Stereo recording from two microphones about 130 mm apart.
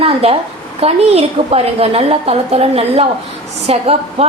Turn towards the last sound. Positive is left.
turn(degrees=-50)  # may be behind; listen again after turning